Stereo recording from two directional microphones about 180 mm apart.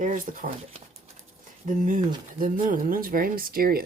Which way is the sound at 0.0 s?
45° right (ahead or behind).